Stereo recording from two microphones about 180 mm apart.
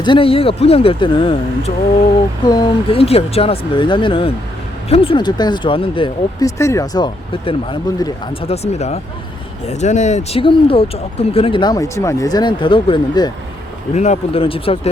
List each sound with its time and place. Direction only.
0.0 s speech: 30° left (ahead or behind)
6.6 s speech: 15° left (ahead or behind)
13.9 s speech: 40° left (ahead or behind)